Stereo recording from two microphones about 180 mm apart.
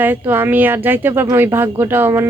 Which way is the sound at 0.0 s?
10° right (ahead or behind).